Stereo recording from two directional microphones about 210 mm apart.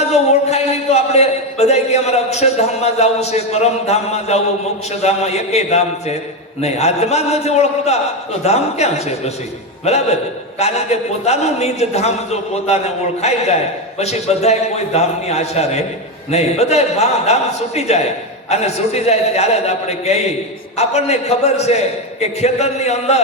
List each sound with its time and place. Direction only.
0.1 s a man's voice: 30° left (ahead or behind)